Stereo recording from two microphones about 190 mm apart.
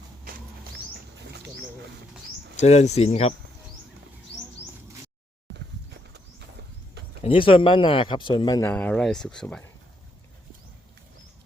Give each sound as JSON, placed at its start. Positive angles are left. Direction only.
{"t": 2.6, "sound": "speech", "side_deg": 35}
{"t": 7.2, "sound": "speech", "side_deg": 30}
{"t": 8.7, "sound": "speech", "side_deg": 5}